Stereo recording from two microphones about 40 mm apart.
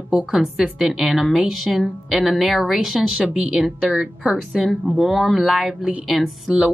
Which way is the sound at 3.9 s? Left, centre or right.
Centre.